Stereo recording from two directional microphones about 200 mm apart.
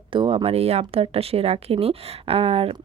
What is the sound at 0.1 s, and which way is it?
Speech, 25° right (ahead or behind).